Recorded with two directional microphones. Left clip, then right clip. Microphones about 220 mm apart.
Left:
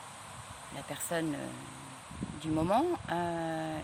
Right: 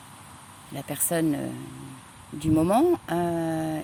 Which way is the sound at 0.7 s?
40° right (ahead or behind).